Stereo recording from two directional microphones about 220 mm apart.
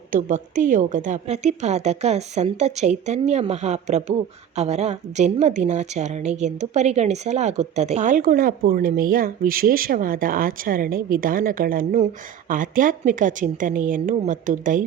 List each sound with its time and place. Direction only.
0.1 s a woman's voice: 35° right (ahead or behind)